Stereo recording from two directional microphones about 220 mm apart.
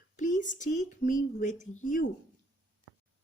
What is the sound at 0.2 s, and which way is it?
Speech, 35° left (ahead or behind).